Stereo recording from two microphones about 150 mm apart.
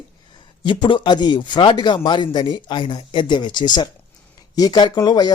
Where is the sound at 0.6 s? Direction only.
35° left (ahead or behind).